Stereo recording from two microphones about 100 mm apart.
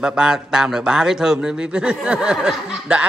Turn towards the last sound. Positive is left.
turn(degrees=-5)  # may be behind; listen again after turning